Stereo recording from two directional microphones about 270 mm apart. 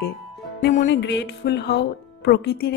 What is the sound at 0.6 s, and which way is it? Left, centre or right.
Speech, left.